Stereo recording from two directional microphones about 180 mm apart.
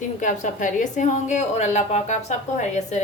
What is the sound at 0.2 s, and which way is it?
A woman's voice, 45° left (ahead or behind).